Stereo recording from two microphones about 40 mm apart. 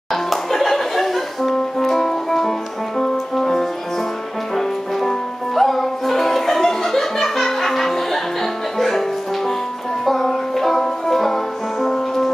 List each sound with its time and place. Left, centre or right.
0.1 s music: centre
10.0 s music: centre